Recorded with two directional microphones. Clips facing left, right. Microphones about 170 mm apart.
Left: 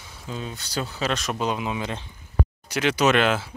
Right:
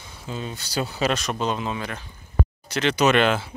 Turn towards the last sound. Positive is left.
turn(degrees=0)  # may be behind; listen again after turning